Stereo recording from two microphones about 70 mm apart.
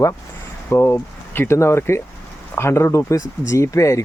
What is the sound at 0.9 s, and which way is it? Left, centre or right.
Speech, left.